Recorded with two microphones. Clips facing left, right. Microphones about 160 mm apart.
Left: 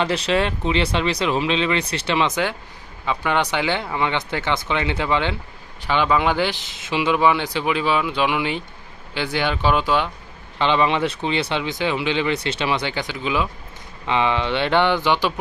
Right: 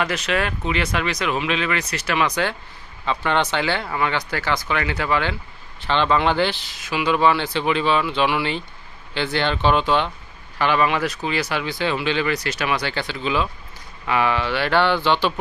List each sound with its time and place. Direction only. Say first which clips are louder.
0.0 s speech: left 3 dB; 30° left (ahead or behind); by 10.1 s 10° left (ahead or behind)
10.6 s speech: left 1 dB; 20° left (ahead or behind)
12.9 s speech: even; 15° left (ahead or behind)